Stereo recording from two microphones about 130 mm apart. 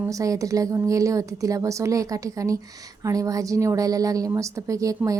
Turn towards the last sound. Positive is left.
turn(degrees=-25)  # may be behind; listen again after turning